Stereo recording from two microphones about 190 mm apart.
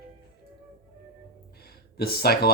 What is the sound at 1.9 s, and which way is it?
Speech, 55° left (ahead or behind).